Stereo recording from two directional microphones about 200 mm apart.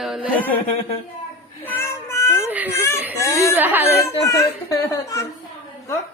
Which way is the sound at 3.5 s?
10° right (ahead or behind).